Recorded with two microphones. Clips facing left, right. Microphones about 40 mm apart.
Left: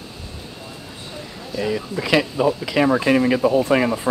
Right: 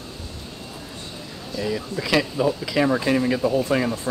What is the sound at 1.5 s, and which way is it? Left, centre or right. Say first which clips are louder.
Speech: left 3 dB; centre.